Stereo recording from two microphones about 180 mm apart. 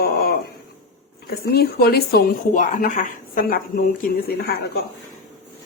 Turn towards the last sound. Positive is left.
turn(degrees=60)  # may be behind; listen again after turning